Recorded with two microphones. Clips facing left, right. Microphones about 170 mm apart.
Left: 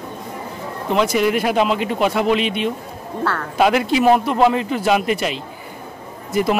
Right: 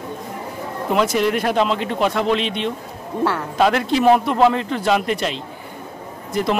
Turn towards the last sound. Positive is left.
turn(degrees=5)  # may be behind; listen again after turning